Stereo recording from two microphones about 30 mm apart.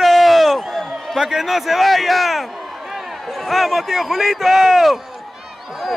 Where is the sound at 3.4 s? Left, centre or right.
Centre.